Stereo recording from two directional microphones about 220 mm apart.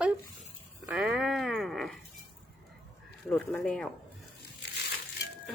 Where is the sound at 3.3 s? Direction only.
5° left (ahead or behind).